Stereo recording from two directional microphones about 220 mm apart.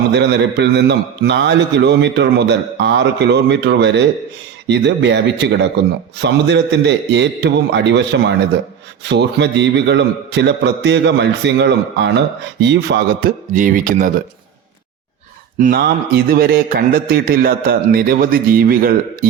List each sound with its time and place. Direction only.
0.1 s a man's voice: 50° right (ahead or behind)
13.5 s a man's voice: 35° right (ahead or behind)
15.5 s a man's voice: 40° right (ahead or behind)